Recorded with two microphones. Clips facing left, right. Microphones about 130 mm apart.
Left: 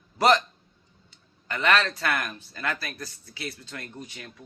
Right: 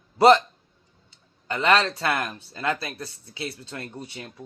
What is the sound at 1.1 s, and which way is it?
Speech, 30° right (ahead or behind).